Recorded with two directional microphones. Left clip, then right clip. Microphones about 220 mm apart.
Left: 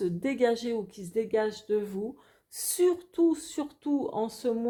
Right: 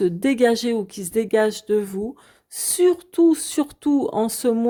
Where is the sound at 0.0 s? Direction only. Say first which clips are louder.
Right 9 dB; 40° right (ahead or behind).